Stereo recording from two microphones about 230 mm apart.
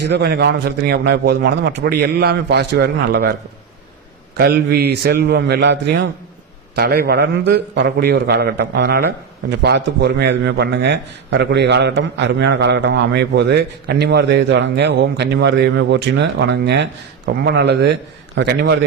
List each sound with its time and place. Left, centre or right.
0.0 s a man's voice: right
4.4 s a man's voice: right